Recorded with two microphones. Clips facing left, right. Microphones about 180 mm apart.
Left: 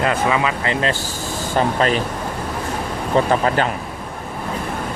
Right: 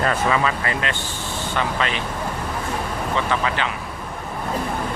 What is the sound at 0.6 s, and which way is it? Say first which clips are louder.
Speech: left 5 dB; 30° left (ahead or behind).